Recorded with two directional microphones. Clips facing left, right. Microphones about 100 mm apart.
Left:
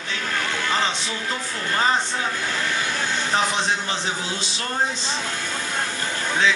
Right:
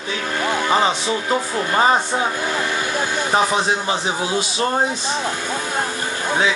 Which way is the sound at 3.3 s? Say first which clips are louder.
Right 5 dB; 15° right (ahead or behind).